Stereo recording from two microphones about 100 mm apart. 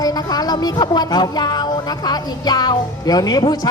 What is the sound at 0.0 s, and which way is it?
A woman's voice, 40° left (ahead or behind).